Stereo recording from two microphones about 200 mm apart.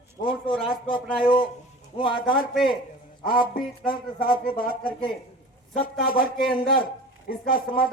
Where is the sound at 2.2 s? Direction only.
45° left (ahead or behind).